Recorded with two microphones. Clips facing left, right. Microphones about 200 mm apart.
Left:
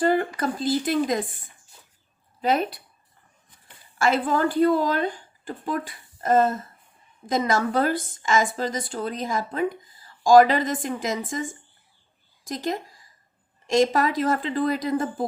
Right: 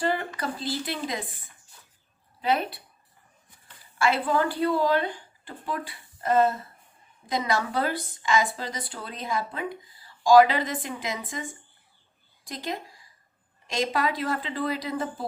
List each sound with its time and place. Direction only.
0.0 s a sound: 50° left (ahead or behind)
0.3 s a woman's voice: 45° left (ahead or behind)
2.4 s a woman's voice: 45° left (ahead or behind)
3.9 s a woman's voice: 45° left (ahead or behind)
12.5 s a woman's voice: 45° left (ahead or behind)